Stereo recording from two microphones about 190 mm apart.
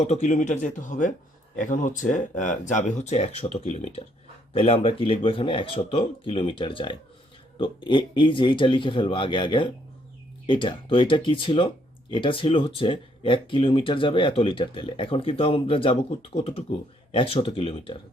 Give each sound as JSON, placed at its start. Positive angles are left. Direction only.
{"t": 0.0, "sound": "speech", "side_deg": 35}